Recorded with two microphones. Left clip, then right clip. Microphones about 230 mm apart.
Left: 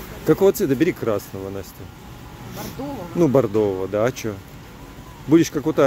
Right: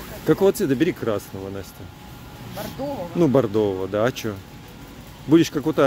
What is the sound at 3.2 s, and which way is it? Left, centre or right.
Speech, centre.